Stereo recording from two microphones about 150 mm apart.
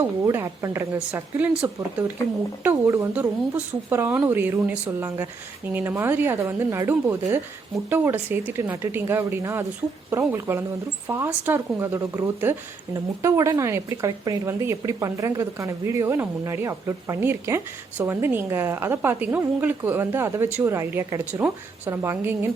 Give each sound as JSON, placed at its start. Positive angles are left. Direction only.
{"t": 0.0, "sound": "speech", "side_deg": -15}
{"t": 2.6, "sound": "speech", "side_deg": -20}